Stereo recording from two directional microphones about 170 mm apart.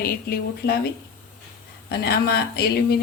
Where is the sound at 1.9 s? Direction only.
70° left (ahead or behind).